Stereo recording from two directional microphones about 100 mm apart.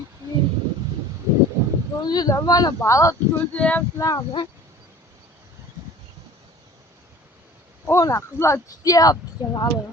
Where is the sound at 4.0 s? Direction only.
35° left (ahead or behind).